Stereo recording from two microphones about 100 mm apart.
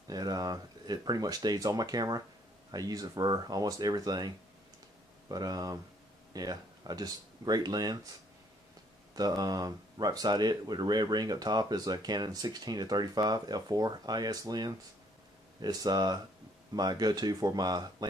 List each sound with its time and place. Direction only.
0.1 s speech: 40° right (ahead or behind)
5.3 s speech: 40° right (ahead or behind)
9.1 s speech: 40° right (ahead or behind)